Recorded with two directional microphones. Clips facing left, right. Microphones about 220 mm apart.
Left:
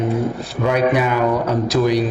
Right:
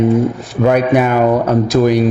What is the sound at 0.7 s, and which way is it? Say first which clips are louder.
Speech: right 4 dB; 50° right (ahead or behind).